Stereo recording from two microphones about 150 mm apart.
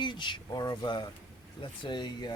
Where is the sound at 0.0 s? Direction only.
30° left (ahead or behind).